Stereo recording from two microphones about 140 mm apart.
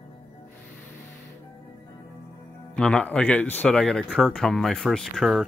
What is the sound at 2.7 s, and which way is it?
Speech, 5° left (ahead or behind).